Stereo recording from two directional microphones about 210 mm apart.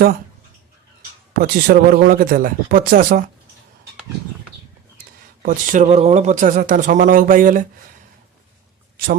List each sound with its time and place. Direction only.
1.3 s speech: 45° right (ahead or behind)
5.4 s speech: 40° right (ahead or behind)